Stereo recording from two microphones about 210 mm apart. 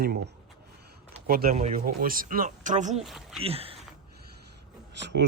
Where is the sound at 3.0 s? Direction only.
Centre (ahead or behind).